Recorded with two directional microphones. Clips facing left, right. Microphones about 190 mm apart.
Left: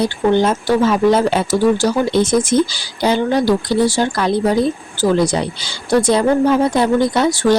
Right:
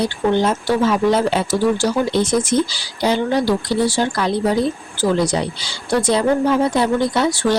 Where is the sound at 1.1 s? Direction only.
45° left (ahead or behind).